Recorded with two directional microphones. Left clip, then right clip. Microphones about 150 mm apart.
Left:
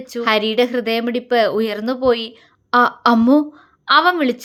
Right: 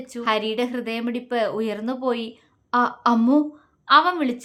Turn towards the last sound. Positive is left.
turn(degrees=30)  # may be behind; listen again after turning